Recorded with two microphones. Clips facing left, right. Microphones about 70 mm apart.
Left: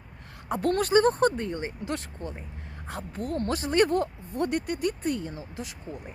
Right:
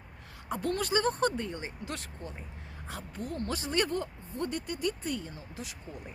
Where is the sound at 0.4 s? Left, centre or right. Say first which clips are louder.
Left 6 dB; left.